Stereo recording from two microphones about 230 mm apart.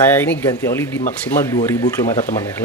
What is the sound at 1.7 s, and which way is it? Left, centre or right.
Speech, centre.